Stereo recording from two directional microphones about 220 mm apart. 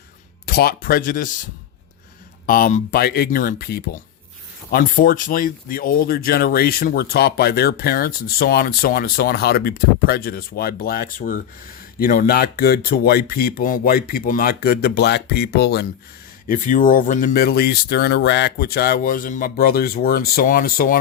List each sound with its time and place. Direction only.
0.4 s speech: 45° left (ahead or behind)
2.5 s speech: 40° left (ahead or behind)
16.5 s speech: 35° left (ahead or behind)